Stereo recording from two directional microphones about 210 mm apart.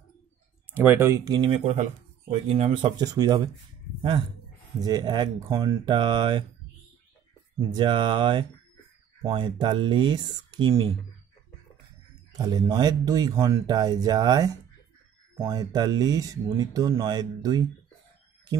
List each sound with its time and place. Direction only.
0.7 s speech: 10° right (ahead or behind)
1.6 s speech: 30° right (ahead or behind)
4.7 s speech: 20° right (ahead or behind)
7.5 s speech: 20° right (ahead or behind)
12.3 s speech: 15° right (ahead or behind)